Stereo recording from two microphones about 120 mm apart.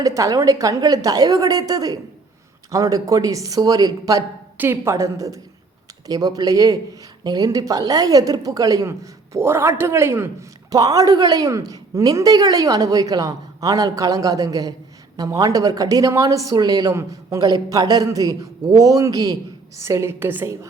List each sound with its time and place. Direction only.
0.0 s a woman's voice: 30° right (ahead or behind)
4.5 s a woman's voice: 20° right (ahead or behind)